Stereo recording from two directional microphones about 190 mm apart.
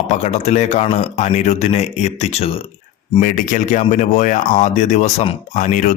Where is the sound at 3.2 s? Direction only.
40° left (ahead or behind).